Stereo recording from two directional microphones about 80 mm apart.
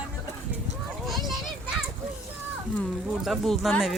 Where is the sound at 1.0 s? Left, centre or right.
Centre.